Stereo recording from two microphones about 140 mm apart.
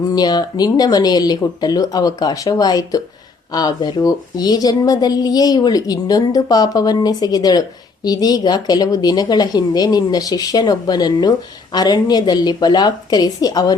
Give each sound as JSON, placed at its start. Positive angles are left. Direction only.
{"t": 0.1, "sound": "speech", "side_deg": 30}